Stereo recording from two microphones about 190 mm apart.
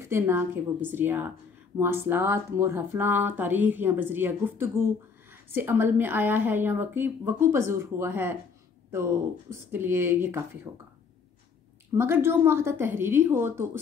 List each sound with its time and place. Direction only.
0.0 s speech: 10° right (ahead or behind)
11.9 s speech: 15° right (ahead or behind)